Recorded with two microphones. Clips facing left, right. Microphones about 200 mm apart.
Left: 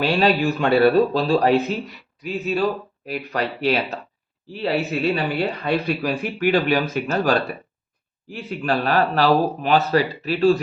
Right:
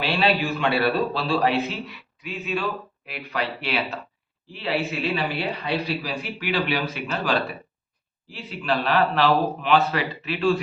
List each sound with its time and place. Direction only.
0.0 s speech: 45° left (ahead or behind)